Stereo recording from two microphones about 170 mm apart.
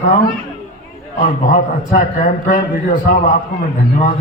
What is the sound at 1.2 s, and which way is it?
A man's voice, 50° left (ahead or behind).